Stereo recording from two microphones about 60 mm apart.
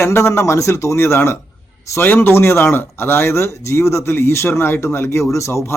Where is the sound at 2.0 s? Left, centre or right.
Left.